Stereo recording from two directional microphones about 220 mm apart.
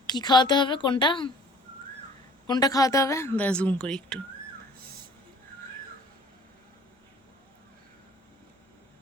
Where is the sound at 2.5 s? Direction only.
15° left (ahead or behind).